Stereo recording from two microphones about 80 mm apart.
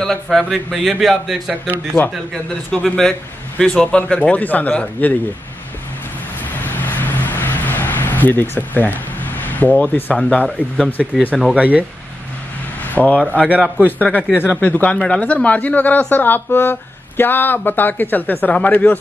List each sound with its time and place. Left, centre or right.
0.0 s a man's voice: centre
2.7 s a man's voice: centre
6.6 s vehicle: left
10.1 s a man's voice: centre
11.5 s speech: centre
12.9 s a man's voice: left